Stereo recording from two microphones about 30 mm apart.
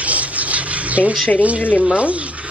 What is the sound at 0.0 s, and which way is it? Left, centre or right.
Rub, right.